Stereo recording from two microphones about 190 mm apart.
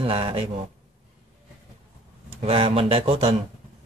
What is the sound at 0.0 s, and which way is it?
Speech, 30° right (ahead or behind).